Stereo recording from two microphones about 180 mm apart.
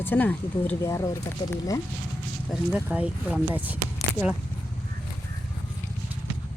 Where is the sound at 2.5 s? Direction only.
5° right (ahead or behind).